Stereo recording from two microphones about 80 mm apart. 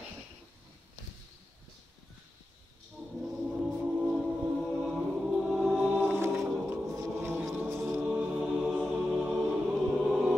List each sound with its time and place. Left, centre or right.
3.2 s music: centre
6.7 s a sound: right
7.5 s music: right